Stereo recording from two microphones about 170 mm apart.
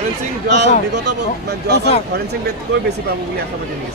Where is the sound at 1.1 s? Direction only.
70° right (ahead or behind).